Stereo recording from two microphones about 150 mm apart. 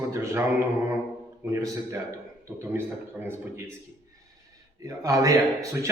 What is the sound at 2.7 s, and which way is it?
Speech, 15° right (ahead or behind).